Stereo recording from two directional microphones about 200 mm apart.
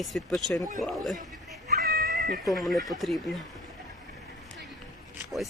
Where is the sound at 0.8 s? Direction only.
Centre (ahead or behind).